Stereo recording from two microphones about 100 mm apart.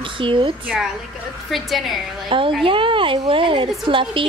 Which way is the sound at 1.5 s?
Centre (ahead or behind).